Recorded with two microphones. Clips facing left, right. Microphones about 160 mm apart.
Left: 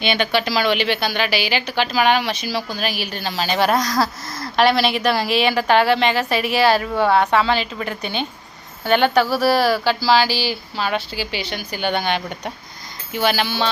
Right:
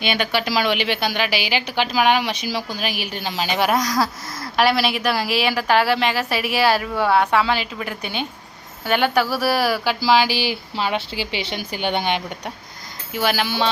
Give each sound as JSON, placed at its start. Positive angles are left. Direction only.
{"t": 0.0, "sound": "a woman's voice", "side_deg": -10}
{"t": 13.1, "sound": "a woman's voice", "side_deg": -10}